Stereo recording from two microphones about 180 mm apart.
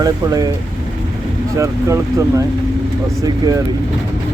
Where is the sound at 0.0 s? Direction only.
20° right (ahead or behind).